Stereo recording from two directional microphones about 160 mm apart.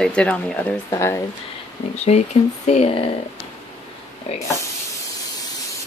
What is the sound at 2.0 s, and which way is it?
Speech, 45° left (ahead or behind).